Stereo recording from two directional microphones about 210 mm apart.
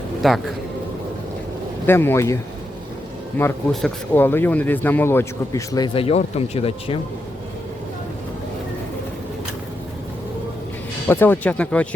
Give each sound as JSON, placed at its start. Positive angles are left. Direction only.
{"t": 0.2, "sound": "a man's voice", "side_deg": 0}
{"t": 1.9, "sound": "speech", "side_deg": 10}
{"t": 11.1, "sound": "speech", "side_deg": 10}